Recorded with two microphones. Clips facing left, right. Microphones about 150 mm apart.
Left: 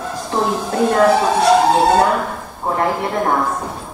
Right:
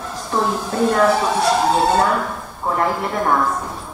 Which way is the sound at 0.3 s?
20° left (ahead or behind).